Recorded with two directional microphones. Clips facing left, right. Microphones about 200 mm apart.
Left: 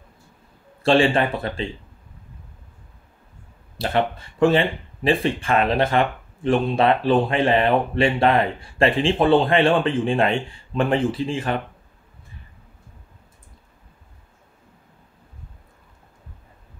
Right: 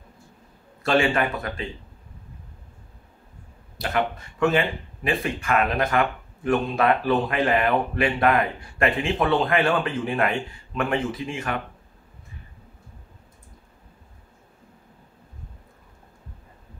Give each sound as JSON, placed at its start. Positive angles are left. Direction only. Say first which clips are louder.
{"t": 0.8, "sound": "speech", "louder": "left 4 dB", "side_deg": 30}
{"t": 3.7, "sound": "speech", "louder": "left 3 dB", "side_deg": 30}